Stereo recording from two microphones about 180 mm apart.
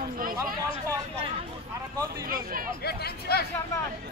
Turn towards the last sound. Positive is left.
turn(degrees=60)  # may be behind; listen again after turning